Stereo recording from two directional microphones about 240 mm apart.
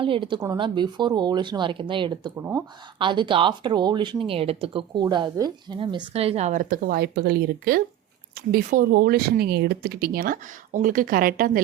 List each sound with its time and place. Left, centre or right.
0.0 s speech: right